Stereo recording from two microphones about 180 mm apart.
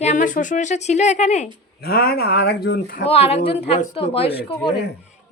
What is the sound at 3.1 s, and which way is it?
Speech, 35° left (ahead or behind).